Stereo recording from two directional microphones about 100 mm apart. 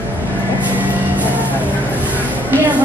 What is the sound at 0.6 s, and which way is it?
Vehicle, 15° right (ahead or behind).